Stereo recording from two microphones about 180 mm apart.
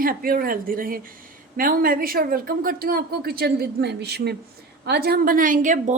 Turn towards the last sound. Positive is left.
turn(degrees=-45)  # may be behind; listen again after turning